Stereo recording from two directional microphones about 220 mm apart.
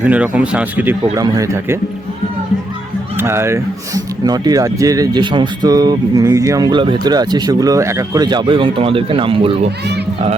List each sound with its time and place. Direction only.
0.0 s speech: 5° right (ahead or behind)
3.2 s speech: 10° right (ahead or behind)